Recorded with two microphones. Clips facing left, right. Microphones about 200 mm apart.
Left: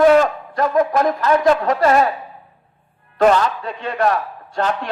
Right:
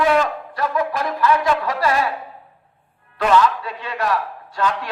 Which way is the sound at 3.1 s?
45° left (ahead or behind).